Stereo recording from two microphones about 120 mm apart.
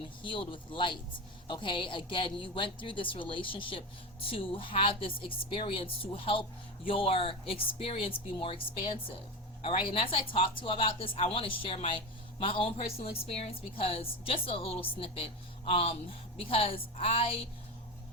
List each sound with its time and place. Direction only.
0.2 s a woman's voice: 45° left (ahead or behind)